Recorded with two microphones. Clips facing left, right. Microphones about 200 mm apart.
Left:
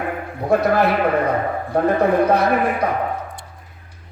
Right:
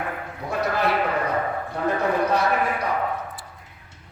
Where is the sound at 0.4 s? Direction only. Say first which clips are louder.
Left 8 dB; 55° left (ahead or behind).